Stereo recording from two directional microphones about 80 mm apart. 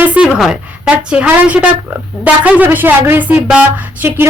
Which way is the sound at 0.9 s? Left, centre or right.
Centre.